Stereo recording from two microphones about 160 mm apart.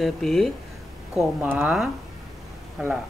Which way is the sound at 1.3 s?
10° right (ahead or behind).